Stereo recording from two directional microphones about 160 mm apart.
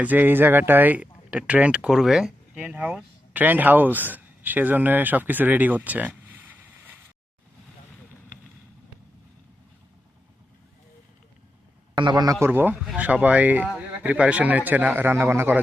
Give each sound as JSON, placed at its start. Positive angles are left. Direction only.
{"t": 0.0, "sound": "speech", "side_deg": -10}
{"t": 11.9, "sound": "a man's voice", "side_deg": -25}
{"t": 12.5, "sound": "speech", "side_deg": -10}